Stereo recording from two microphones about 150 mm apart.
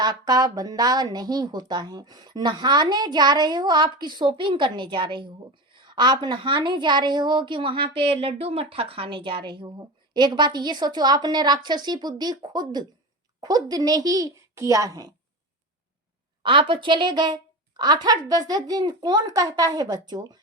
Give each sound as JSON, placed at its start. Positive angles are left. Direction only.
{"t": 0.0, "sound": "a woman's voice", "side_deg": -25}
{"t": 16.4, "sound": "a woman's voice", "side_deg": -35}